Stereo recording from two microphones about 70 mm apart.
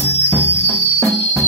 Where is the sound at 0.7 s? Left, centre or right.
Left.